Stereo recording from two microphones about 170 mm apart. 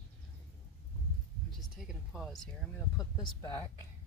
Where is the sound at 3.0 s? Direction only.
20° left (ahead or behind).